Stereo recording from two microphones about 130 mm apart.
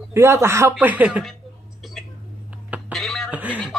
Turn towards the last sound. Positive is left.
turn(degrees=-10)  # may be behind; listen again after turning